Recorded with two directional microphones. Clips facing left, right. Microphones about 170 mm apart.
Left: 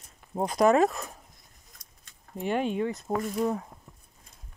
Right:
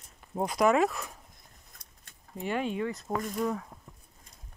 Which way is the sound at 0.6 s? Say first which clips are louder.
Left 3 dB; 35° left (ahead or behind).